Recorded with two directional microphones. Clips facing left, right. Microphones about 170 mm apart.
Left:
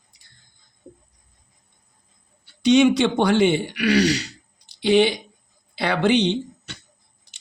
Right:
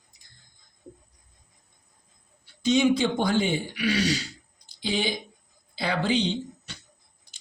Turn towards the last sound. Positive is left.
turn(degrees=70)  # may be behind; listen again after turning